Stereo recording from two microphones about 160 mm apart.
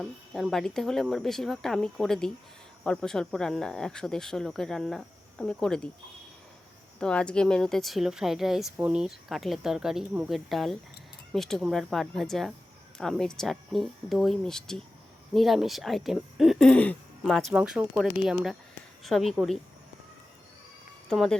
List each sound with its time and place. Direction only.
0.0 s speech: centre (ahead or behind)
7.0 s speech: 5° left (ahead or behind)
21.1 s speech: 5° left (ahead or behind)